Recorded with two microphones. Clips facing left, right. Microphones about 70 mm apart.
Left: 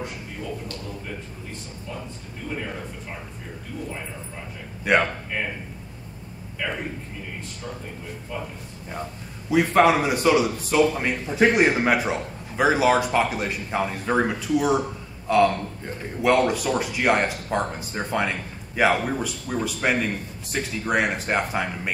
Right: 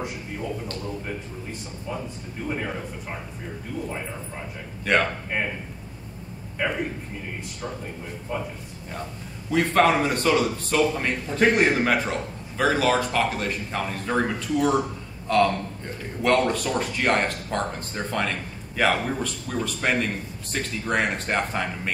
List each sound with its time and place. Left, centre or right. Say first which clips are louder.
4.9 s a man's voice: left 2 dB; centre
6.6 s speech: right 3 dB; right
9.5 s a man's voice: left 2 dB; centre